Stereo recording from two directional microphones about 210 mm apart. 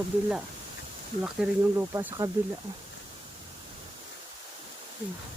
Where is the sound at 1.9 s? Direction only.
15° right (ahead or behind).